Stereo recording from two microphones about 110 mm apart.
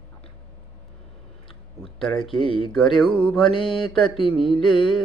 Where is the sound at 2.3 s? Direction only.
55° left (ahead or behind).